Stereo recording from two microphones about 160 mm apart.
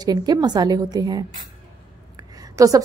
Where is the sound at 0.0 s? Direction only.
25° right (ahead or behind).